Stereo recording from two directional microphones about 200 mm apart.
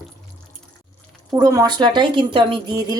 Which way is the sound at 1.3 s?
20° right (ahead or behind).